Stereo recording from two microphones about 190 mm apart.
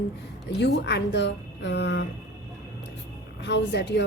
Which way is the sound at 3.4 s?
65° left (ahead or behind).